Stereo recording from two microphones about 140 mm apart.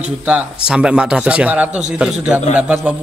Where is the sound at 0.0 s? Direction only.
10° right (ahead or behind).